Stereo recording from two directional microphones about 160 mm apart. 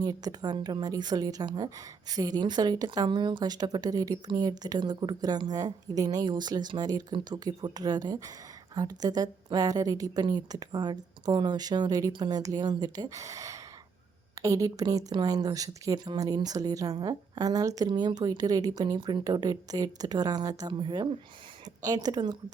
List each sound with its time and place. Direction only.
0.0 s a woman's voice: 25° right (ahead or behind)